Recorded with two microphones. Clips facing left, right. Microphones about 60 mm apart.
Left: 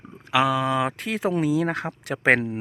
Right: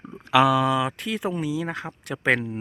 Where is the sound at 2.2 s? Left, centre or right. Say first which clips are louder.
Left 3 dB; left.